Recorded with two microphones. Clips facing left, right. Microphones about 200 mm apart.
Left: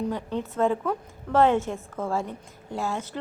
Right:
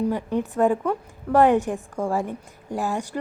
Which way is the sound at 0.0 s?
10° right (ahead or behind).